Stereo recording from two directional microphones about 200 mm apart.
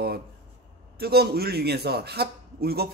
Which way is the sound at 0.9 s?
50° right (ahead or behind).